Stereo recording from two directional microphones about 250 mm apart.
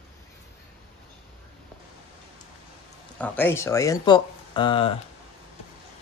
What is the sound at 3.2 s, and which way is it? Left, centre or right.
Speech, centre.